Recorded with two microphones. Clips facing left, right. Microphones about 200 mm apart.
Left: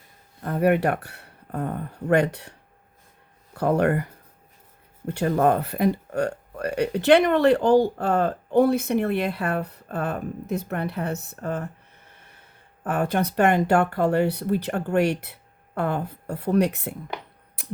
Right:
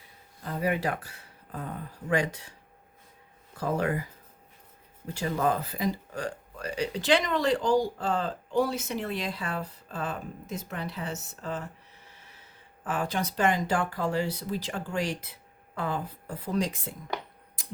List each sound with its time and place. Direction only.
0.4 s speech: 60° left (ahead or behind)
17.6 s mechanisms: 65° left (ahead or behind)